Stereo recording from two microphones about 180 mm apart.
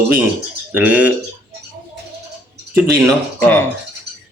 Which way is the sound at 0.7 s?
10° right (ahead or behind).